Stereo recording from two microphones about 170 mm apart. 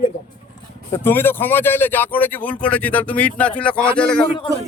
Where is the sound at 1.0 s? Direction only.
10° left (ahead or behind).